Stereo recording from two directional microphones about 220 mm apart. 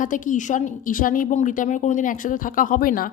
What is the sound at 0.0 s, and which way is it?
A woman's voice, 35° left (ahead or behind).